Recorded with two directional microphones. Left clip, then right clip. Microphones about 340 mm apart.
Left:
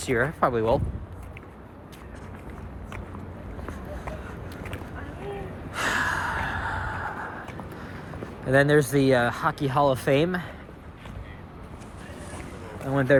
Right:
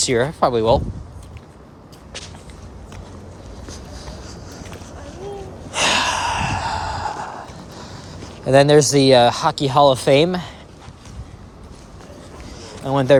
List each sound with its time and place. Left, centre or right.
0.0 s speech: centre
5.7 s sigh: centre
8.4 s speech: centre
12.9 s speech: centre